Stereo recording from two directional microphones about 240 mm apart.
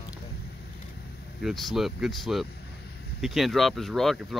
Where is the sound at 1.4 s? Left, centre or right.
Centre.